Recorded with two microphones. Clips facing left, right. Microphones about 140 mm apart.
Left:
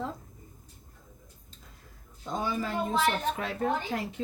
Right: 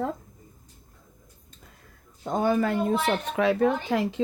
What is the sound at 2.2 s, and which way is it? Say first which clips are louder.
Speech: right 8 dB; 55° right (ahead or behind).